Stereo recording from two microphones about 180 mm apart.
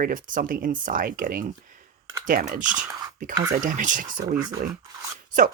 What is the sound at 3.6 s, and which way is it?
Speech, 45° right (ahead or behind).